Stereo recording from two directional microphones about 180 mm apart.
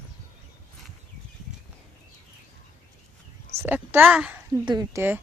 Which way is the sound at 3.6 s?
10° right (ahead or behind).